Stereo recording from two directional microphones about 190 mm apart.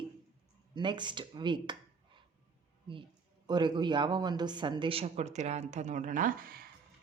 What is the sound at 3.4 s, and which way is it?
Speech, 20° right (ahead or behind).